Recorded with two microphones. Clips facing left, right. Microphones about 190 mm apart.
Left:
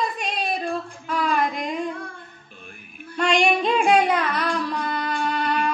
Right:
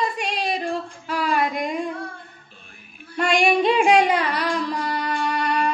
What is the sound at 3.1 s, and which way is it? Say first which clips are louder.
Child singing: right 1 dB; 10° right (ahead or behind).